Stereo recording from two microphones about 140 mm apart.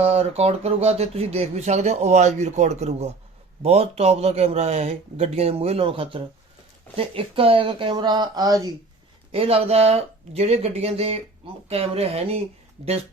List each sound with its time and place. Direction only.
0.0 s speech: 45° right (ahead or behind); by 8.7 s 25° right (ahead or behind)
9.3 s speech: 45° right (ahead or behind)